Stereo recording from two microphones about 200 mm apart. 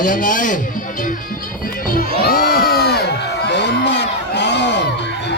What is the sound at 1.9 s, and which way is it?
Crowd, 45° left (ahead or behind).